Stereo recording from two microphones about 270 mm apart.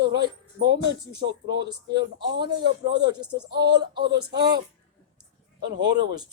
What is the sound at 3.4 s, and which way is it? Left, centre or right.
Speech, right.